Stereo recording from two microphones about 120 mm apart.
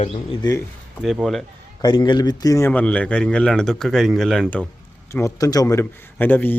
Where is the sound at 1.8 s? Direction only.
40° left (ahead or behind).